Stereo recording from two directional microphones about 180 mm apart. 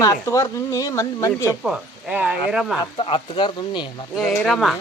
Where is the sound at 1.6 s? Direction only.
5° right (ahead or behind).